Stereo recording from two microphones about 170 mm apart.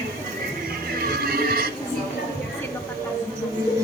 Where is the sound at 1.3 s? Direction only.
65° right (ahead or behind).